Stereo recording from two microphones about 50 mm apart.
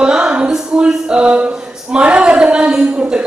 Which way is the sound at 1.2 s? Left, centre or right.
Right.